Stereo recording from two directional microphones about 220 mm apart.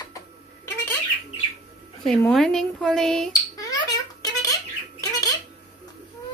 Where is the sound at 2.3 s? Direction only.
Centre (ahead or behind).